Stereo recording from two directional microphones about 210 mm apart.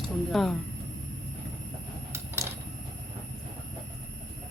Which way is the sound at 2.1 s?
10° right (ahead or behind).